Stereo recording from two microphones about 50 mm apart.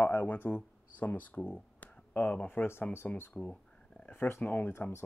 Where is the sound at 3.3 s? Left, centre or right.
Left.